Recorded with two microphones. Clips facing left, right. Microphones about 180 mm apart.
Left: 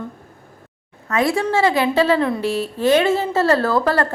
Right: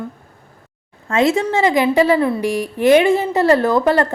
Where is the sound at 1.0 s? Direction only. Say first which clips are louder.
Right 3 dB; 25° right (ahead or behind).